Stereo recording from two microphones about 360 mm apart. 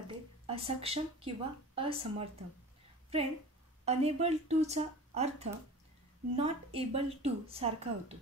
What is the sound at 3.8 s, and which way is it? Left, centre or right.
Speech, centre.